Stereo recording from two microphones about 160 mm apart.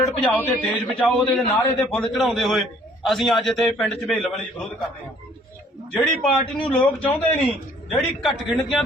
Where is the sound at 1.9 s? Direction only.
5° left (ahead or behind).